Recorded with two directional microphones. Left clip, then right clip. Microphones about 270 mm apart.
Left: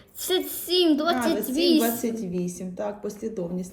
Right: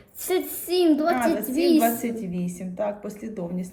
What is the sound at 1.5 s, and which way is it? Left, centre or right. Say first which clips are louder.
Speech: even; centre.